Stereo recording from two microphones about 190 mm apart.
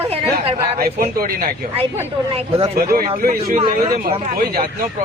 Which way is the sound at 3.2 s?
45° right (ahead or behind).